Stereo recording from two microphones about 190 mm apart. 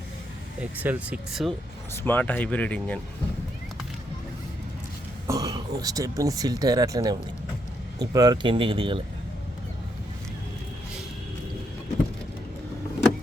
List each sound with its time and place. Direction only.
0.6 s speech: 10° right (ahead or behind)
2.0 s speech: 10° left (ahead or behind)
5.3 s speech: 20° right (ahead or behind)